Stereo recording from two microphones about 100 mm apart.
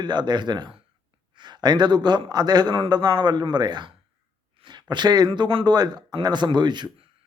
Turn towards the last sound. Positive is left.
turn(degrees=-45)  # may be behind; listen again after turning